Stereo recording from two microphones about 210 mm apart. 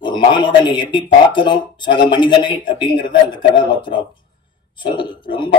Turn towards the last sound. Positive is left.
turn(degrees=25)  # may be behind; listen again after turning